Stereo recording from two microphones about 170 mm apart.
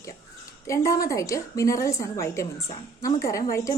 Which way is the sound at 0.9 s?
20° left (ahead or behind).